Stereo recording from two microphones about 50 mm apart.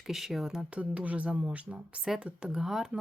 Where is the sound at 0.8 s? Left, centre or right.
Right.